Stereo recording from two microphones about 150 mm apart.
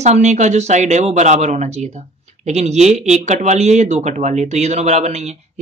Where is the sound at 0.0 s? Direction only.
50° right (ahead or behind).